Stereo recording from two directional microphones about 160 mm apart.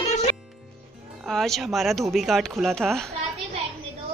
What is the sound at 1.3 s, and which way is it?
Speech, centre (ahead or behind).